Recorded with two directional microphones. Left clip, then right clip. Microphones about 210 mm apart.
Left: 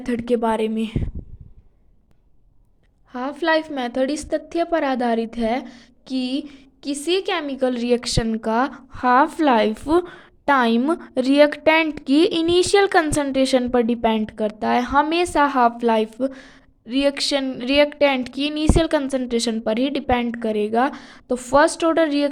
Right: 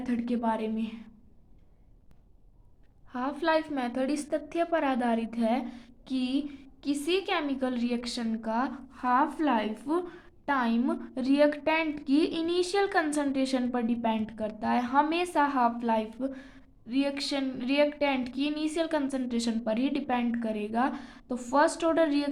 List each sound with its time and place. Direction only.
0.0 s a woman's voice: 45° left (ahead or behind)
3.1 s a woman's voice: 35° left (ahead or behind)